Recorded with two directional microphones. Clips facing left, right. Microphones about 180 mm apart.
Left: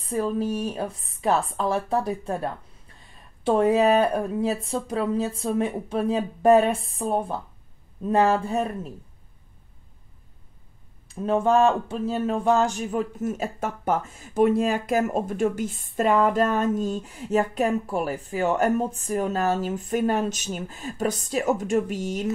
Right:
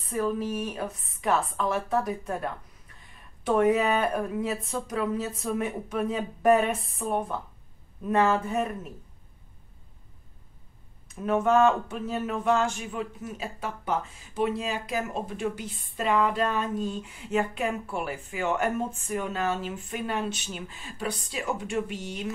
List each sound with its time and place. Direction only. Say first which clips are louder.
0.0 s speech: left 3 dB; 30° left (ahead or behind)
11.1 s speech: left 2 dB; 30° left (ahead or behind)